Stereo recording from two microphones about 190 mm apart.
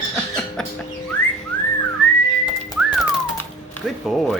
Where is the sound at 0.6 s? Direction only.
5° left (ahead or behind).